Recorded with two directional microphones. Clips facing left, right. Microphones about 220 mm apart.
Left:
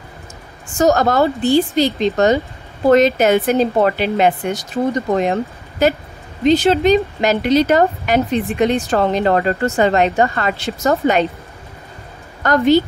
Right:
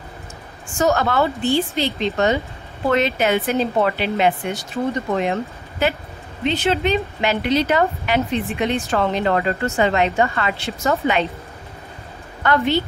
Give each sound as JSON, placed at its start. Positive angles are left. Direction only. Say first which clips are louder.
{"t": 0.7, "sound": "a woman's voice", "louder": "left 4 dB", "side_deg": 40}
{"t": 12.4, "sound": "speech", "louder": "left 6 dB", "side_deg": 40}